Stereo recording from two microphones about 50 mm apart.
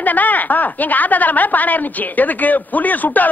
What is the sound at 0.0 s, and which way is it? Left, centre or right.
A woman's voice, left.